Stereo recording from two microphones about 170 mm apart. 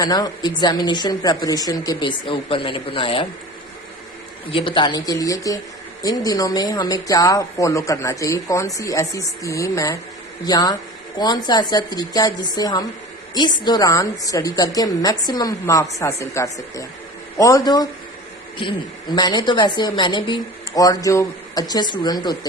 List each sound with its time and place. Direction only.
0.0 s speech: 25° left (ahead or behind)
4.5 s speech: 30° left (ahead or behind)